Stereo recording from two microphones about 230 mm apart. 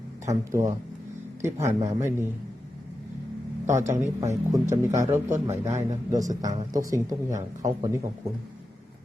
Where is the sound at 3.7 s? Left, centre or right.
Centre.